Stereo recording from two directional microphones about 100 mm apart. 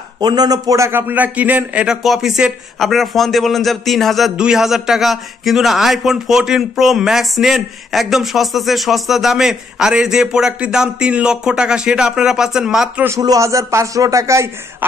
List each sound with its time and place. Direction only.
0.2 s a man's voice: 45° right (ahead or behind); by 2.0 s 15° right (ahead or behind)
2.0 s speech: 5° right (ahead or behind)
13.2 s speech: 35° right (ahead or behind)